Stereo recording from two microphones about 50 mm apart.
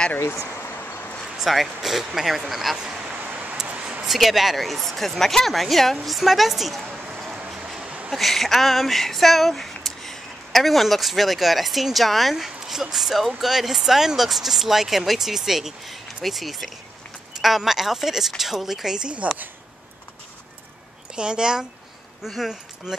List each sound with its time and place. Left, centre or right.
0.2 s speech: left
1.2 s speech: centre
2.8 s speech: centre
3.1 s a sound: right
3.6 s a sound: right
4.0 s speech: centre
7.4 s a sound: centre
8.1 s speech: centre
21.2 s speech: centre
22.2 s speech: centre